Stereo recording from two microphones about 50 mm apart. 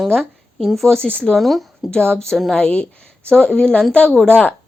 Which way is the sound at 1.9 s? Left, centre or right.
Centre.